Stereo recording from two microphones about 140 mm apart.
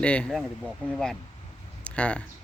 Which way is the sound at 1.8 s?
10° left (ahead or behind).